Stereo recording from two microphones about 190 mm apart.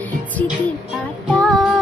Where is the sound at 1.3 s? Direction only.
5° left (ahead or behind).